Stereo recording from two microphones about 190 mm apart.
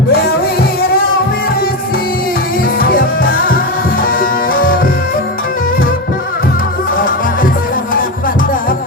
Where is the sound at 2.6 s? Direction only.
50° left (ahead or behind).